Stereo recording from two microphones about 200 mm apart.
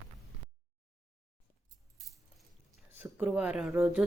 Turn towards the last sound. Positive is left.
turn(degrees=-5)  # may be behind; listen again after turning